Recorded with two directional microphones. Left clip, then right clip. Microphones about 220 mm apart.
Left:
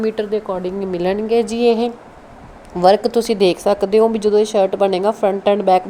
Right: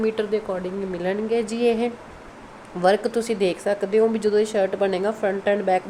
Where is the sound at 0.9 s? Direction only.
25° left (ahead or behind).